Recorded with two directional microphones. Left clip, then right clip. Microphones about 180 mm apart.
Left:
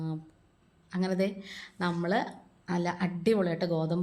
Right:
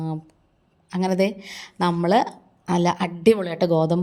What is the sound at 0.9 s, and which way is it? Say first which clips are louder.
A woman's voice: right 9 dB; 40° right (ahead or behind).